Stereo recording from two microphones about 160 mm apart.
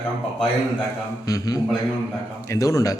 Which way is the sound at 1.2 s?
20° left (ahead or behind).